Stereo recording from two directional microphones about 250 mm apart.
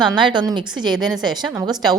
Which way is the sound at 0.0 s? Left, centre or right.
Centre.